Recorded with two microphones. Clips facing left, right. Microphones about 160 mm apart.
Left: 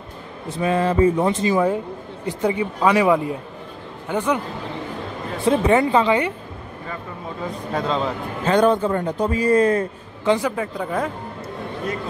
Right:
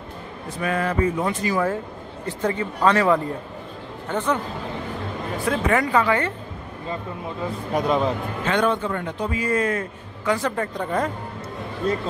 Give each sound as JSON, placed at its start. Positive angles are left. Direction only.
{"t": 0.5, "sound": "speech", "side_deg": 25}
{"t": 5.4, "sound": "speech", "side_deg": 25}
{"t": 7.7, "sound": "a man's voice", "side_deg": -15}
{"t": 8.5, "sound": "a man's voice", "side_deg": 40}
{"t": 10.5, "sound": "speech", "side_deg": 5}
{"t": 11.9, "sound": "a man's voice", "side_deg": -30}